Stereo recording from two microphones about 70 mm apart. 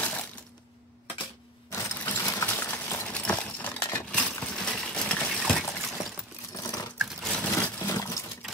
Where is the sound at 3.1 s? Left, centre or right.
Centre.